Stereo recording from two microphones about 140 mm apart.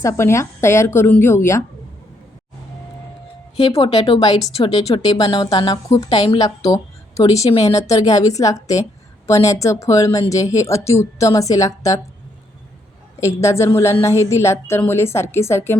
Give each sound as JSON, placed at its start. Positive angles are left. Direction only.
{"t": 0.0, "sound": "a woman's voice", "side_deg": 20}
{"t": 3.6, "sound": "a woman's voice", "side_deg": 30}
{"t": 6.6, "sound": "a woman's voice", "side_deg": 25}
{"t": 13.1, "sound": "a woman's voice", "side_deg": 20}